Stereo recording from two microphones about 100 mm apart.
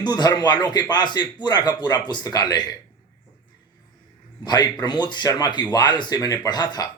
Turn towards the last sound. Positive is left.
turn(degrees=45)  # may be behind; listen again after turning